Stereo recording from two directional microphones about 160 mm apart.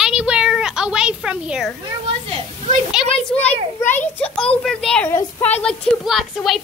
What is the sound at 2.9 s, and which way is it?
A child's voice, 5° left (ahead or behind).